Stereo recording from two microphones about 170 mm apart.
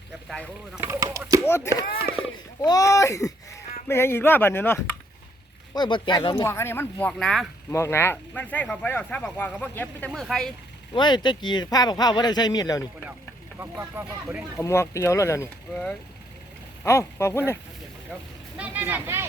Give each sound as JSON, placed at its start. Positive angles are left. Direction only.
{"t": 0.8, "sound": "speech", "side_deg": -15}
{"t": 1.5, "sound": "speech", "side_deg": 15}
{"t": 5.7, "sound": "speech", "side_deg": 25}
{"t": 6.5, "sound": "speech", "side_deg": 15}
{"t": 7.1, "sound": "speech", "side_deg": 0}
{"t": 7.7, "sound": "speech", "side_deg": 15}
{"t": 10.9, "sound": "speech", "side_deg": 25}
{"t": 13.6, "sound": "speech", "side_deg": -15}
{"t": 14.6, "sound": "speech", "side_deg": 15}
{"t": 15.7, "sound": "speech", "side_deg": 5}
{"t": 18.5, "sound": "speech", "side_deg": -10}